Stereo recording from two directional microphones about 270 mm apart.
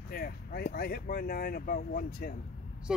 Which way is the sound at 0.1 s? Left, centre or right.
Left.